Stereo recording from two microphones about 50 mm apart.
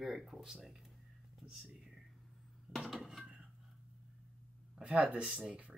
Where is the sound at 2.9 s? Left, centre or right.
Centre.